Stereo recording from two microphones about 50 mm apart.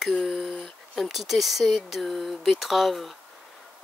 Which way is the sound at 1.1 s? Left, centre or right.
Centre.